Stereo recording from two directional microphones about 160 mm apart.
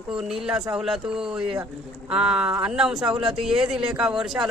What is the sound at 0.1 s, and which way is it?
Speech, 5° right (ahead or behind).